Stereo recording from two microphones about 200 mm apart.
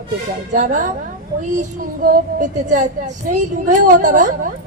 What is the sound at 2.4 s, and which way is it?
A woman's voice, 40° right (ahead or behind).